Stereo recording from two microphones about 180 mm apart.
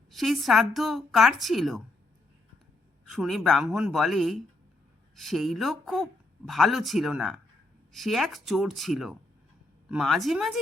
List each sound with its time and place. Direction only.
0.1 s speech: centre (ahead or behind)
3.1 s speech: centre (ahead or behind)